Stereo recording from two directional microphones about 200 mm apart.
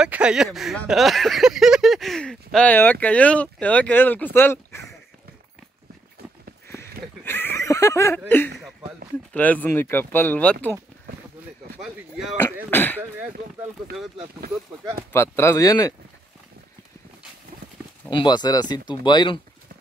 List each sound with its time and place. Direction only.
0.0 s speech: 5° right (ahead or behind); by 4.8 s 10° left (ahead or behind)
6.7 s a sound: 10° left (ahead or behind)
9.3 s speech: 10° left (ahead or behind)
11.8 s speech: centre (ahead or behind)
12.6 s speech: 10° left (ahead or behind)
15.1 s speech: 15° left (ahead or behind)
18.1 s speech: 20° left (ahead or behind)